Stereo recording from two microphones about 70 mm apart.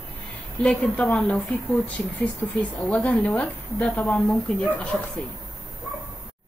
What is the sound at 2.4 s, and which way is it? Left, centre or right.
A woman's voice, centre.